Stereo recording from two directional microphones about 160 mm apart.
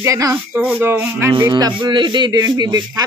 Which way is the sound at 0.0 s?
20° right (ahead or behind).